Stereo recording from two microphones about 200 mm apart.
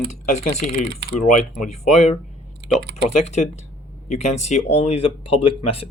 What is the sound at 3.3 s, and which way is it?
Speech, 35° left (ahead or behind).